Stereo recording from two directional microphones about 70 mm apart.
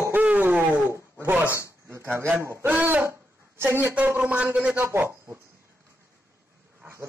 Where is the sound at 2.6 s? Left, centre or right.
Right.